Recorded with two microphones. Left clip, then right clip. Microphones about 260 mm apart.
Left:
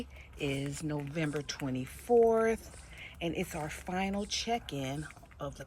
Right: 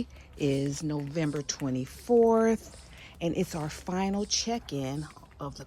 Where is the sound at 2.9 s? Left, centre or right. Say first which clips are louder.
Right 4 dB; right.